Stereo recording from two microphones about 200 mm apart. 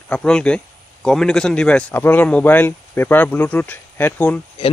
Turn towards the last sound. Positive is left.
turn(degrees=10)  # may be behind; listen again after turning